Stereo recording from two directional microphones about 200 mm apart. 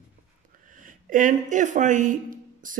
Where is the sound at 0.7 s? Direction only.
40° right (ahead or behind).